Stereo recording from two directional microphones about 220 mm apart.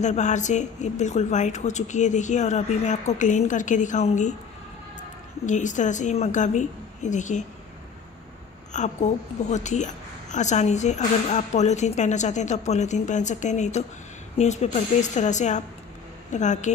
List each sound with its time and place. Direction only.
0.0 s a woman's voice: 30° left (ahead or behind)
5.4 s a woman's voice: 35° left (ahead or behind)
8.7 s a woman's voice: 30° left (ahead or behind)